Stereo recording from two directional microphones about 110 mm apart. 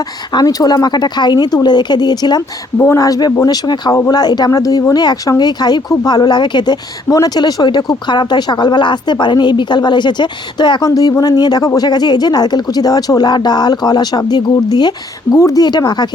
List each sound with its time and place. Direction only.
0.3 s speech: 35° left (ahead or behind)
2.7 s speech: 25° left (ahead or behind); by 16.0 s 40° left (ahead or behind)